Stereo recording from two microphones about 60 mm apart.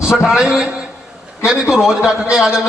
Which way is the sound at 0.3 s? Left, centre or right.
Centre.